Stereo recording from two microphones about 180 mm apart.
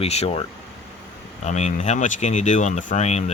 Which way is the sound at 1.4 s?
40° left (ahead or behind).